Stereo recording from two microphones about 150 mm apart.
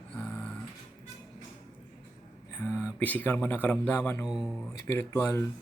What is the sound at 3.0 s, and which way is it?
Speech, 10° left (ahead or behind).